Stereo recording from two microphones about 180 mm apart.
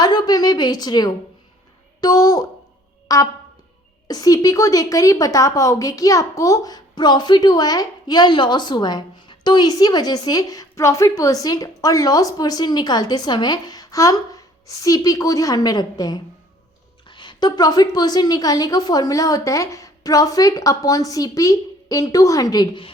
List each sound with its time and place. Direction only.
0.0 s a woman's voice: 20° left (ahead or behind)